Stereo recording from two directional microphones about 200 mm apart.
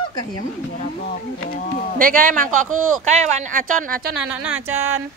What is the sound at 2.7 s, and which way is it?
Speech, 90° right.